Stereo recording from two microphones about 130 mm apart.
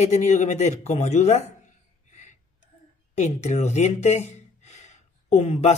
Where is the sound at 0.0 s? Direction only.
60° left (ahead or behind).